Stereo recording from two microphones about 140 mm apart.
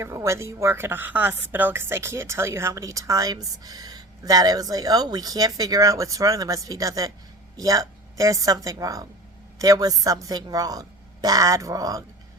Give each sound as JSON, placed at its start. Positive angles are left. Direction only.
{"t": 0.0, "sound": "a woman's voice", "side_deg": -20}